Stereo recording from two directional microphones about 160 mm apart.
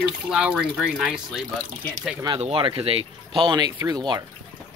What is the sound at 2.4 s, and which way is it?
Speech, 35° right (ahead or behind).